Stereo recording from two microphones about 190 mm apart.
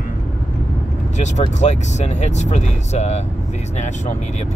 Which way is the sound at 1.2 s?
35° left (ahead or behind).